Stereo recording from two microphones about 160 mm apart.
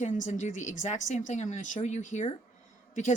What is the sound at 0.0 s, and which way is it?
Speech, 50° left (ahead or behind).